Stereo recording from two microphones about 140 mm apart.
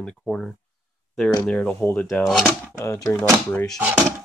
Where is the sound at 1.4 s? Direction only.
10° left (ahead or behind).